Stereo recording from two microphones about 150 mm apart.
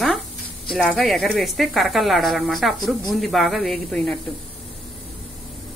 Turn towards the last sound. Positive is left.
turn(degrees=0)  # may be behind; listen again after turning